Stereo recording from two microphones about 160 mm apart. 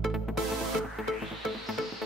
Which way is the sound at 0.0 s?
Centre (ahead or behind).